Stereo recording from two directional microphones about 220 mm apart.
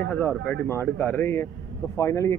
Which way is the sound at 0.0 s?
10° left (ahead or behind).